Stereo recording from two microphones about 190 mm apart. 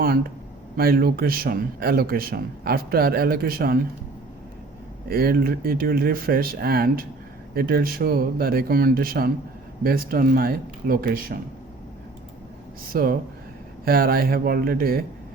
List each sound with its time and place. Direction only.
0.8 s speech: 55° right (ahead or behind)
5.0 s speech: 55° right (ahead or behind)
12.9 s speech: 50° right (ahead or behind)